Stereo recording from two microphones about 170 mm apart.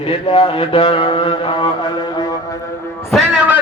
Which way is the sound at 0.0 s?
30° left (ahead or behind).